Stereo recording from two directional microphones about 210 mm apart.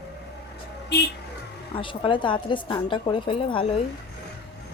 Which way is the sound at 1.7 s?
25° left (ahead or behind).